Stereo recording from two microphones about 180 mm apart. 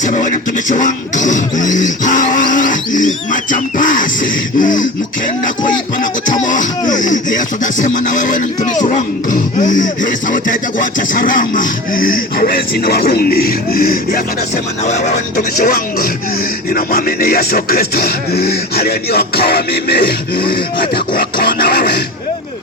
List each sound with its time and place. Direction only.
0.0 s music: 45° left (ahead or behind)
6.0 s music: 45° left (ahead or behind)
14.8 s speech: 40° left (ahead or behind); by 20.4 s 60° left (ahead or behind)
20.8 s a sound: 25° left (ahead or behind)
21.3 s speech: 55° left (ahead or behind)